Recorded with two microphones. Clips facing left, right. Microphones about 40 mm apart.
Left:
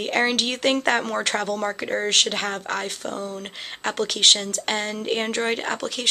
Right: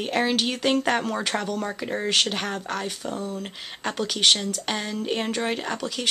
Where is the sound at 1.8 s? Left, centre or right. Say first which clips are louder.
Left 1 dB; left.